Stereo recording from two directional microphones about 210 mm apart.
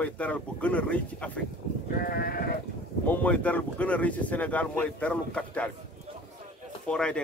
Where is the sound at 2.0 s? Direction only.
45° left (ahead or behind).